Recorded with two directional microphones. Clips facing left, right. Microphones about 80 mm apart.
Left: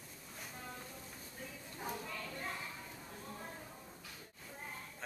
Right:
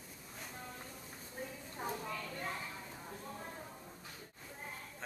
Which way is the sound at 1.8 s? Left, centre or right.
Right.